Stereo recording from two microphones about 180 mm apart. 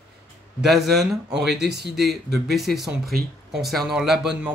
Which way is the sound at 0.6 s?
Centre (ahead or behind).